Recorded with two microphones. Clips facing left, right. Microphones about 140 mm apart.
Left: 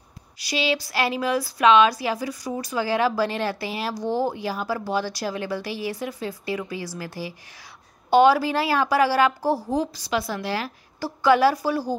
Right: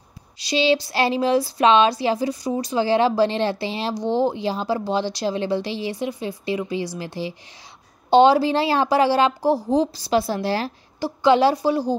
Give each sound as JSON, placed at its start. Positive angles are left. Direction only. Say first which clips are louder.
{"t": 0.4, "sound": "speech", "louder": "right 6 dB", "side_deg": -25}
{"t": 11.0, "sound": "speech", "louder": "right 2 dB", "side_deg": -20}